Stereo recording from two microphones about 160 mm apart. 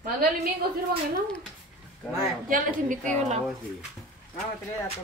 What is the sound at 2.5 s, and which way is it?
Speech, 50° right (ahead or behind).